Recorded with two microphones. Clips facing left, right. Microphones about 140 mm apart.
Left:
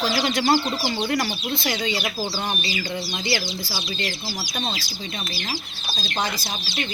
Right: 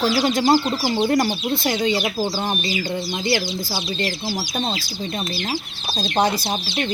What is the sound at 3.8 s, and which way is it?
Speech, 30° right (ahead or behind).